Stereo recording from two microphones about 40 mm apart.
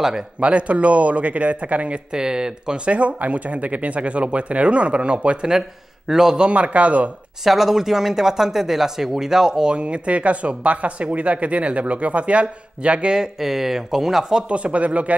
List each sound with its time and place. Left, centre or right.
0.4 s speech: right
2.1 s speech: centre
5.5 s speech: centre
6.4 s speech: right
7.4 s speech: centre; by 13.1 s right
13.1 s speech: centre
14.5 s speech: right